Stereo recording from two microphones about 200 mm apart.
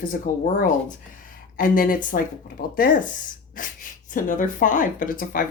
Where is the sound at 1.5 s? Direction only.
45° left (ahead or behind).